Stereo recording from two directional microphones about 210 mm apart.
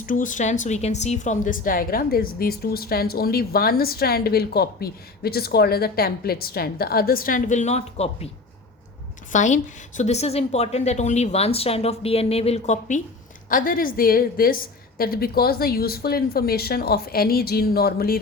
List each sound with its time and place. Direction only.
0.0 s a woman's voice: 40° left (ahead or behind)
9.3 s a woman's voice: 35° left (ahead or behind)